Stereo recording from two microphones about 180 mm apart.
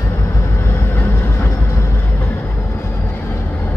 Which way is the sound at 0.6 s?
15° left (ahead or behind).